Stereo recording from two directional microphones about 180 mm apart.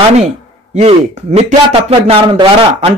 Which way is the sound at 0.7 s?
35° right (ahead or behind).